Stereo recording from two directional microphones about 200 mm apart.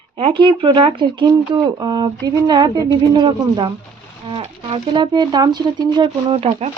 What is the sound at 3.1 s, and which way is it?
Speech, 25° right (ahead or behind).